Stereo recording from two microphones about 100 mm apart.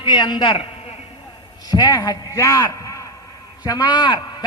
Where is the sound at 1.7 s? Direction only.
40° left (ahead or behind).